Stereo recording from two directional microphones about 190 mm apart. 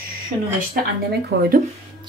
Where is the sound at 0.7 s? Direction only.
55° right (ahead or behind).